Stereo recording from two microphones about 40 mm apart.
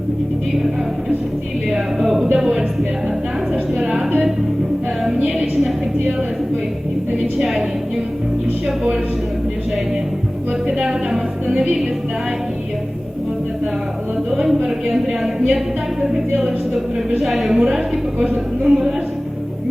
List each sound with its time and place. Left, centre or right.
1.7 s a woman's voice: centre
2.4 s music: centre
3.5 s a sound: centre
5.0 s music: centre
7.3 s a woman's voice: centre
8.6 s a woman's voice: centre
10.7 s speech: centre
14.3 s a woman's voice: centre
18.6 s a woman's voice: centre